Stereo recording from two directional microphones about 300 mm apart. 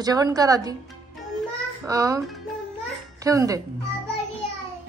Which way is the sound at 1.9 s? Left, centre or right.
Centre.